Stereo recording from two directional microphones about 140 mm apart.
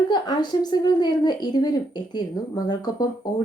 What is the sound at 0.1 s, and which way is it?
A woman's voice, 30° left (ahead or behind).